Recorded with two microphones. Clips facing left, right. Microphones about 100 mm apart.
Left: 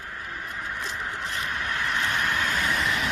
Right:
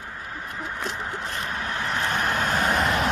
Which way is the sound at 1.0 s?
35° right (ahead or behind).